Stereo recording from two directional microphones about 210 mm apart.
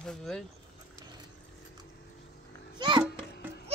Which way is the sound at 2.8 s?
20° right (ahead or behind).